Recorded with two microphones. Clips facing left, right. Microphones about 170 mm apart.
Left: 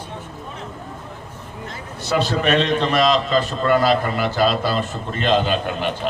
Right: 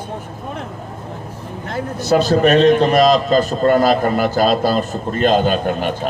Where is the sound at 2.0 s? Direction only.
40° right (ahead or behind).